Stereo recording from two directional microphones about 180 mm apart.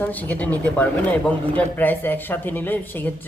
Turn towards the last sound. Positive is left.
turn(degrees=10)  # may be behind; listen again after turning